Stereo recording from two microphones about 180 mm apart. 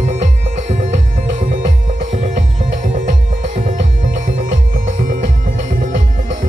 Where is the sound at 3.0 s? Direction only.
45° right (ahead or behind).